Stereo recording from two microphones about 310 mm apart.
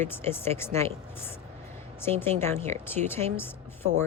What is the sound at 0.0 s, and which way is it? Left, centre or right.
A woman's voice, centre.